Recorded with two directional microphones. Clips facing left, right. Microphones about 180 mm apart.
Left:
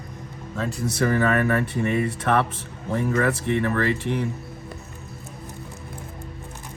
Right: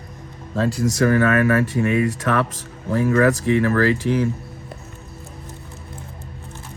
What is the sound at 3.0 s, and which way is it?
Speech, 80° right.